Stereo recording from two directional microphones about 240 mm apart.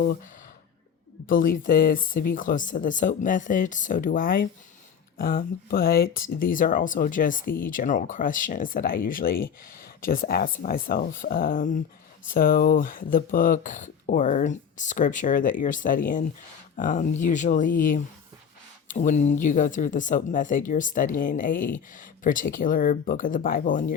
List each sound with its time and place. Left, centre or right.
0.0 s speech: left
1.3 s speech: left